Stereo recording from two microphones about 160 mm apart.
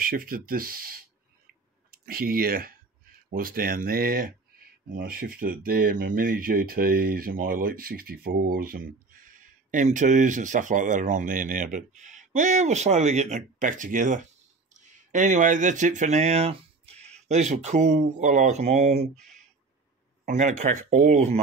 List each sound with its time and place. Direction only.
0.0 s speech: 65° right (ahead or behind); by 19.2 s 45° right (ahead or behind)
20.2 s speech: 50° right (ahead or behind)